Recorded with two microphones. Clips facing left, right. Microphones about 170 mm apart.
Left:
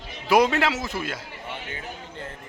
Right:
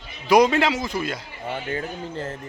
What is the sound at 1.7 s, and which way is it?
Speech, 40° right (ahead or behind).